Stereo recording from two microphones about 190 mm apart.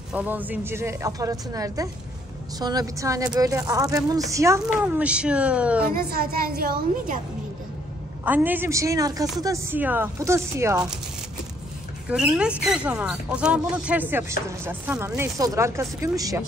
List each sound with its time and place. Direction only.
0.1 s speech: 10° right (ahead or behind)
6.0 s speech: 50° right (ahead or behind)
8.3 s speech: 10° right (ahead or behind)
12.1 s speech: 5° right (ahead or behind)